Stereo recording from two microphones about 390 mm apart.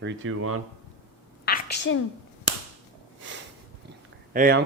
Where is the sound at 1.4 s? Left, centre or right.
Left.